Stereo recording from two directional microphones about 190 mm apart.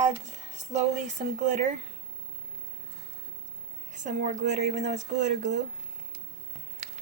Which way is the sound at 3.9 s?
40° right (ahead or behind).